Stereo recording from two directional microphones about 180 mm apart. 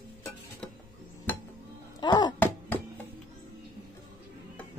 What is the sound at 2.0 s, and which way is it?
Speech, 25° left (ahead or behind).